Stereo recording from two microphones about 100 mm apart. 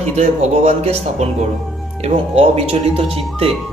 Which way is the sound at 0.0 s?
90° right.